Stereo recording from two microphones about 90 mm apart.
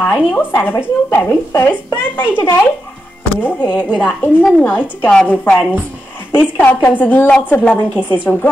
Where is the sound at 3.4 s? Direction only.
20° left (ahead or behind).